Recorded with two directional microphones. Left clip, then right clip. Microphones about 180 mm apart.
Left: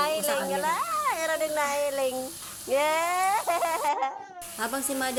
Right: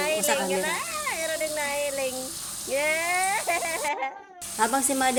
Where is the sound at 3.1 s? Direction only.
30° left (ahead or behind).